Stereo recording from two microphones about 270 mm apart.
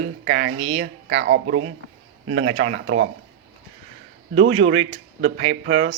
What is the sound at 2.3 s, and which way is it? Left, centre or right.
Speech, right.